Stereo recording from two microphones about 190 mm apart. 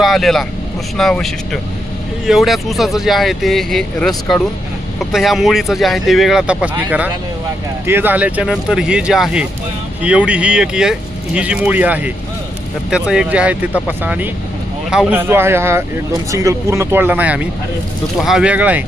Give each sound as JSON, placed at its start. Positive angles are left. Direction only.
{"t": 0.0, "sound": "speech", "side_deg": 0}